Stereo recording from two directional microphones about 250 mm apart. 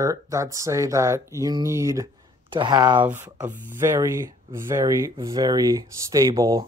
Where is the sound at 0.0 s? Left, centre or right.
Centre.